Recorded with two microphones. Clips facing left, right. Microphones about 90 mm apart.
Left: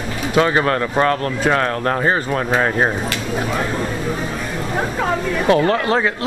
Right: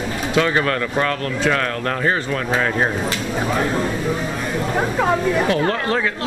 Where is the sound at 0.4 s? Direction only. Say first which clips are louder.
Left 3 dB; 25° left (ahead or behind).